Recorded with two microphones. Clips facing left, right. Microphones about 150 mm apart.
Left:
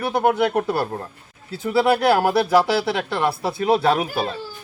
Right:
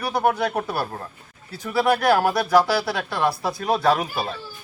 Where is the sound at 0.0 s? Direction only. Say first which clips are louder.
Left 3 dB; 20° left (ahead or behind).